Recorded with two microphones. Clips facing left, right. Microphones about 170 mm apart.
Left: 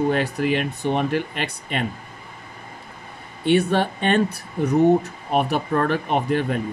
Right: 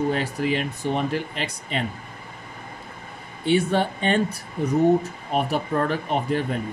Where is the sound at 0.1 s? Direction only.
65° left (ahead or behind).